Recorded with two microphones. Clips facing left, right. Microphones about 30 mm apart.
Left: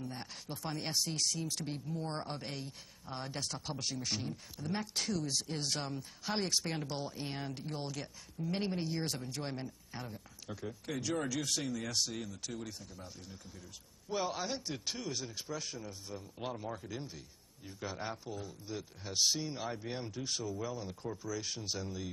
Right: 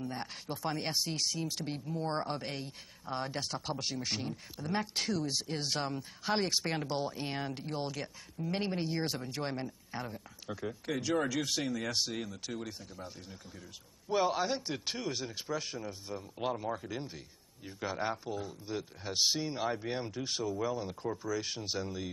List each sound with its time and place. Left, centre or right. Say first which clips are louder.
0.0 s speech: right 4 dB; centre